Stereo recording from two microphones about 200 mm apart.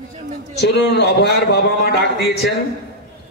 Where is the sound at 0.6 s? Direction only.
55° left (ahead or behind).